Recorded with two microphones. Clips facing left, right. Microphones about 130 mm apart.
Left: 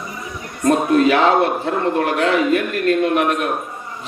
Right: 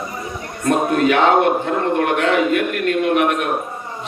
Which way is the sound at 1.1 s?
35° left (ahead or behind).